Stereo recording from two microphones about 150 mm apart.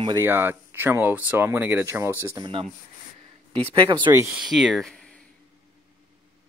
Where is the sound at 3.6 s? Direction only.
30° right (ahead or behind).